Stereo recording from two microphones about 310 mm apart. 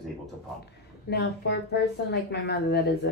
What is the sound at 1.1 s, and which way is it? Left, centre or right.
A woman's voice, left.